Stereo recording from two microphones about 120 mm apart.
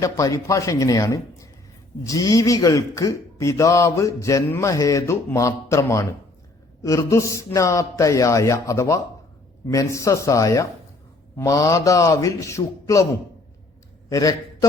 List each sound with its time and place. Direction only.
0.0 s a man's voice: 25° left (ahead or behind)
14.1 s speech: 30° left (ahead or behind)